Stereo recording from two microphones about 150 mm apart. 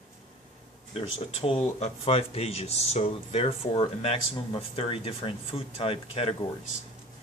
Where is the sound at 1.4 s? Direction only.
45° left (ahead or behind).